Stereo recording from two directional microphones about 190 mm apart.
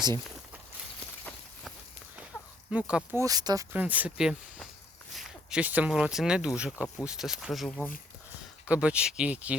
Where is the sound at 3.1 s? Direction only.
15° right (ahead or behind).